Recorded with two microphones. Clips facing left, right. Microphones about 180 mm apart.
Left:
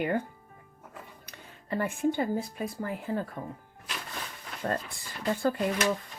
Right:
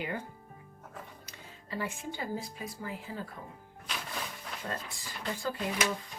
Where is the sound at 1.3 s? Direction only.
55° left (ahead or behind).